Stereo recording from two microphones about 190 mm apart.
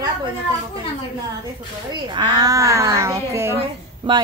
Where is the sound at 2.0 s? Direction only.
20° right (ahead or behind).